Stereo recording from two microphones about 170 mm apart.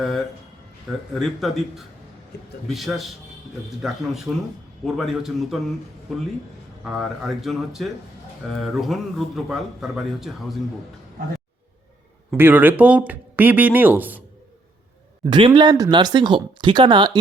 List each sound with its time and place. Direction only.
0.0 s a man's voice: centre (ahead or behind)
2.3 s a man's voice: 75° left (ahead or behind)
2.6 s a man's voice: centre (ahead or behind)
6.8 s a man's voice: centre (ahead or behind)
12.4 s speech: 10° right (ahead or behind)
15.2 s speech: 30° right (ahead or behind)